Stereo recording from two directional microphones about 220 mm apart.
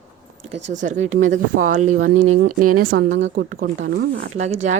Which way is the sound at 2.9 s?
40° right (ahead or behind).